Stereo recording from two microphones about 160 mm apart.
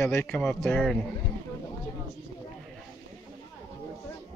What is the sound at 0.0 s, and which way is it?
Speech, 15° left (ahead or behind).